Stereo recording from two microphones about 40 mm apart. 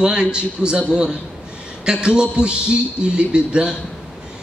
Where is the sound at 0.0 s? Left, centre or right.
Right.